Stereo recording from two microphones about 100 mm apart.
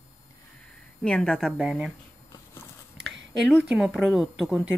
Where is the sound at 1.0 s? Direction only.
10° left (ahead or behind).